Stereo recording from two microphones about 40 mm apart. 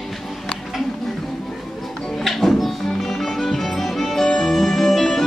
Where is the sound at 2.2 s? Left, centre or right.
Centre.